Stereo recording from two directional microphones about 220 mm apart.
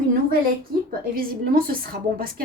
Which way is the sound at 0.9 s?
40° right (ahead or behind).